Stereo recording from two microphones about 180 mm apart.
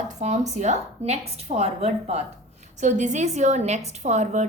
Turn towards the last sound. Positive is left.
turn(degrees=-40)  # may be behind; listen again after turning